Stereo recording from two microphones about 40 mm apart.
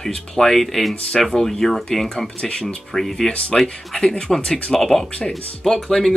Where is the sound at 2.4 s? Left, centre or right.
Centre.